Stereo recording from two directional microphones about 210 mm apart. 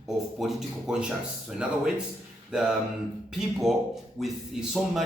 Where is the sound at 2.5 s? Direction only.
5° right (ahead or behind).